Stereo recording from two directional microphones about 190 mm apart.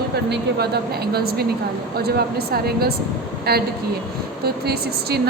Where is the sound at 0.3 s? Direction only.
60° right (ahead or behind).